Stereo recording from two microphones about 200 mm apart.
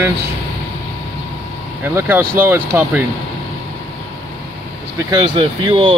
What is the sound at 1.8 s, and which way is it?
Speech, 10° right (ahead or behind).